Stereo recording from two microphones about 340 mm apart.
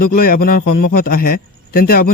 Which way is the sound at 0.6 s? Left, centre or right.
Left.